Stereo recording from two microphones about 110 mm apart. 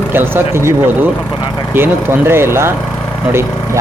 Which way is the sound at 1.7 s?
20° right (ahead or behind).